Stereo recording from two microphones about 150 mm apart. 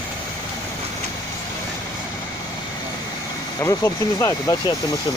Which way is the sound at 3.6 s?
20° left (ahead or behind).